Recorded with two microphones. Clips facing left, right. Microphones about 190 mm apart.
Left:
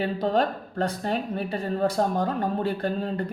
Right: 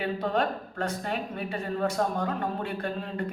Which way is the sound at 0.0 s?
35° left (ahead or behind).